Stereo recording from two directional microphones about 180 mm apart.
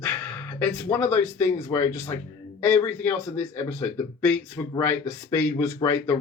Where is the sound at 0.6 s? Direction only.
10° left (ahead or behind).